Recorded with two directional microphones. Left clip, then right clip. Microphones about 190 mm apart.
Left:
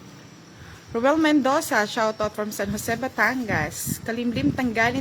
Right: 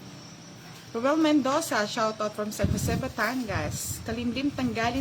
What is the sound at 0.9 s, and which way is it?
A woman's voice, 40° left (ahead or behind).